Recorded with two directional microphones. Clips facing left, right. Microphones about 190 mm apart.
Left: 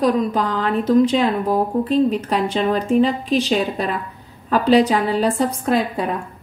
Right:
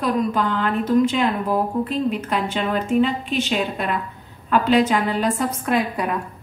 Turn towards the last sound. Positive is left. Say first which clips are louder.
# left 2 dB
turn(degrees=30)  # may be behind; listen again after turning